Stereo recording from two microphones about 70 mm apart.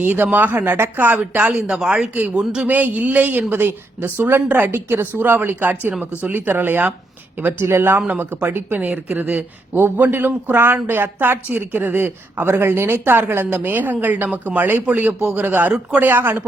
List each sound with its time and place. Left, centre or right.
0.0 s speech: right; by 2.0 s centre
2.1 s speech: right
2.4 s speech: centre
2.6 s speech: right